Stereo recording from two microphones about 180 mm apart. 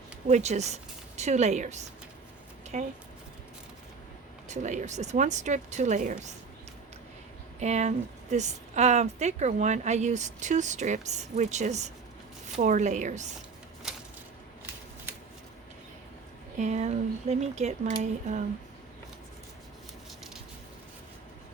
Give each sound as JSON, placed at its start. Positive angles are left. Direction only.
{"t": 0.3, "sound": "a woman's voice", "side_deg": -40}
{"t": 4.4, "sound": "a woman's voice", "side_deg": -40}
{"t": 7.6, "sound": "a woman's voice", "side_deg": -40}
{"t": 16.6, "sound": "a woman's voice", "side_deg": -40}